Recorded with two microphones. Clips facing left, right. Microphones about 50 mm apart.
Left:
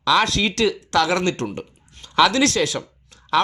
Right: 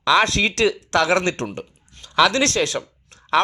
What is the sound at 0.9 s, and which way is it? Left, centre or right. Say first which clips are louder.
Speech: right 1 dB; right.